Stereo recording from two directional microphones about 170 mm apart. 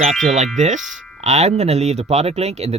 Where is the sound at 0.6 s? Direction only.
45° right (ahead or behind).